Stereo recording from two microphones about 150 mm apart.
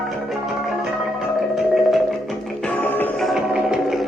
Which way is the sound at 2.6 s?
10° left (ahead or behind).